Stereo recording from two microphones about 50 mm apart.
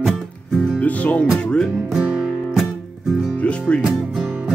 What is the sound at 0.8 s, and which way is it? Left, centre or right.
Music, left.